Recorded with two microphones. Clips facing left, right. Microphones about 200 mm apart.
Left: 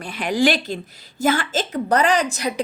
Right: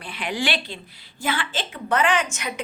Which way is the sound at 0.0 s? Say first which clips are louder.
Left 8 dB; 45° left (ahead or behind).